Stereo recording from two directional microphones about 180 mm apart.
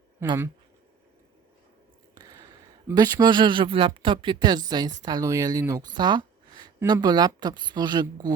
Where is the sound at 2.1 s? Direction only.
20° right (ahead or behind).